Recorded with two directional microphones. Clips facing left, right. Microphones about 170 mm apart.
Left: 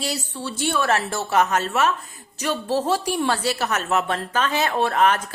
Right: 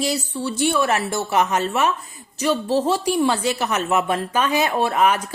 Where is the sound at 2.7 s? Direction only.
10° left (ahead or behind).